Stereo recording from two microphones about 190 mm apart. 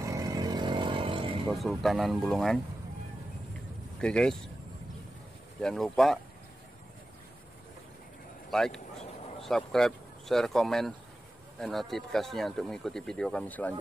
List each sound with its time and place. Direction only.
0.0 s vehicle: 15° right (ahead or behind)
1.5 s speech: centre (ahead or behind)
4.0 s speech: 5° left (ahead or behind)
5.6 s speech: 5° left (ahead or behind)
8.5 s a sound: centre (ahead or behind)
11.6 s speech: centre (ahead or behind)